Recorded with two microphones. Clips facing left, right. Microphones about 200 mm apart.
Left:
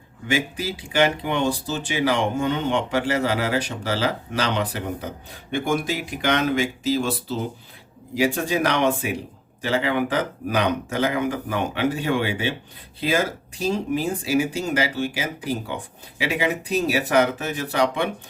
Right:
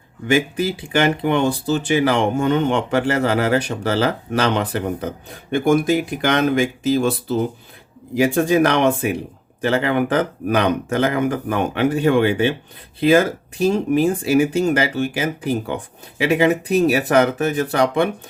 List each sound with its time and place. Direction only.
0.3 s speech: 55° right (ahead or behind)